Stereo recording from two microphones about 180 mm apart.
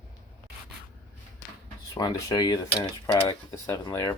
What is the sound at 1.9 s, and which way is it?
Speech, 20° left (ahead or behind).